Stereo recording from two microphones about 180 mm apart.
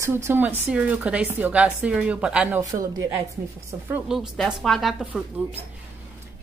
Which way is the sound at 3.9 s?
5° right (ahead or behind).